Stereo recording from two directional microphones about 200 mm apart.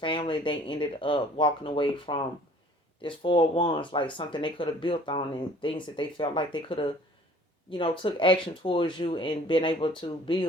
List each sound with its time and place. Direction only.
0.0 s speech: 25° left (ahead or behind)